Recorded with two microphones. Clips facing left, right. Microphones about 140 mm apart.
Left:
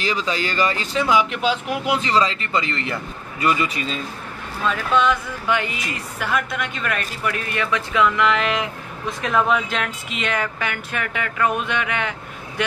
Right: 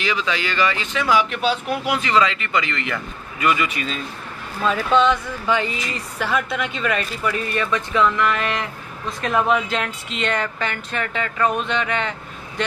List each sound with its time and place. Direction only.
0.0 s speech: 35° left (ahead or behind)
1.0 s speech: 20° left (ahead or behind)
2.0 s speech: 30° left (ahead or behind)
4.6 s a woman's voice: 5° left (ahead or behind)
7.9 s speech: 10° left (ahead or behind)
9.2 s speech: centre (ahead or behind)